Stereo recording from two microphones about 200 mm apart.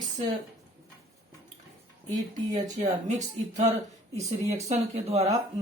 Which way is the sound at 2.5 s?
35° right (ahead or behind).